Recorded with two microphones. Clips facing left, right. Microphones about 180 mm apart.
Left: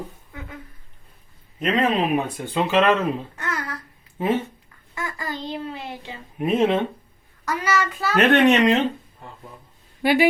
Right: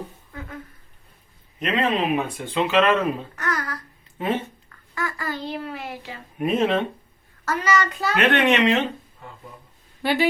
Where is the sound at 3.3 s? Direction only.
25° left (ahead or behind).